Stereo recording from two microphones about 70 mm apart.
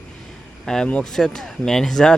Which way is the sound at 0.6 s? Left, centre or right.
Centre.